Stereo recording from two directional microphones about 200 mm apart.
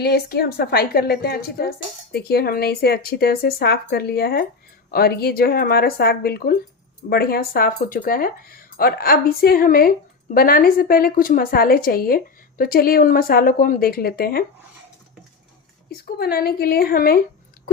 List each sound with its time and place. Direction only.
0.0 s a woman's voice: 50° left (ahead or behind)
15.9 s a woman's voice: 50° left (ahead or behind)